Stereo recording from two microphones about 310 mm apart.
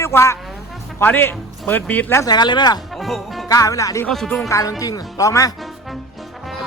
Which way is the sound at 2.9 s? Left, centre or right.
Centre.